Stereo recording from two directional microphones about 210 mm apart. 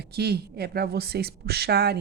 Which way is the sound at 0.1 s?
50° right (ahead or behind).